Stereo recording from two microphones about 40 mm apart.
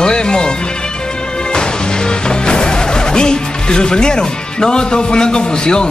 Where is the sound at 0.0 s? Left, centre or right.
Left.